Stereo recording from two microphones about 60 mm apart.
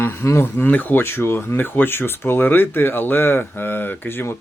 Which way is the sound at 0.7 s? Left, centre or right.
Left.